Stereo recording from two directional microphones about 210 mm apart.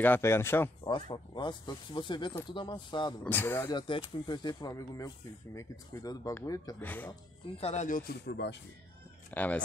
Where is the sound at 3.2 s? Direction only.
10° left (ahead or behind).